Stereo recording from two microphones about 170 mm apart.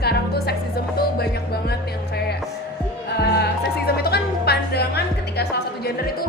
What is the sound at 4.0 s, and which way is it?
Music, 65° left (ahead or behind).